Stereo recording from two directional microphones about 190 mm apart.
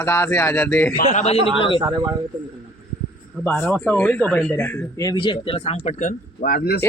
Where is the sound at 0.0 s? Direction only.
15° left (ahead or behind).